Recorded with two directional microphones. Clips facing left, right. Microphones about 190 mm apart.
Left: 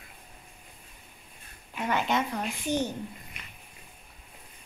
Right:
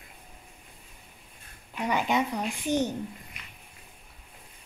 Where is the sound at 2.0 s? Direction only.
15° right (ahead or behind).